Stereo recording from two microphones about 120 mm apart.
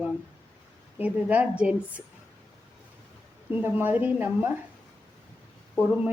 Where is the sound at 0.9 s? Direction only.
15° right (ahead or behind).